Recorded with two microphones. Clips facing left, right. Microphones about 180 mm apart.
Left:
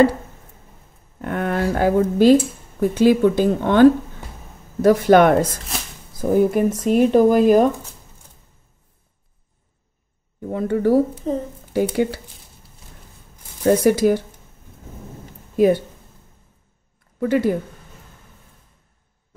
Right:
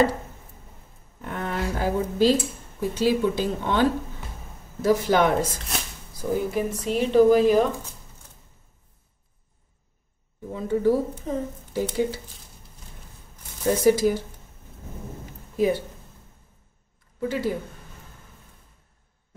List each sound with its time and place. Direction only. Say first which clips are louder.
1.2 s speech: left 7 dB; 60° left (ahead or behind)
6.3 s speech: left 9 dB; 50° left (ahead or behind)
10.5 s speech: left 5 dB; 65° left (ahead or behind)
13.7 s speech: left 4 dB; 60° left (ahead or behind)
15.5 s speech: left 7 dB; 60° left (ahead or behind)
17.2 s speech: left 8 dB; 55° left (ahead or behind)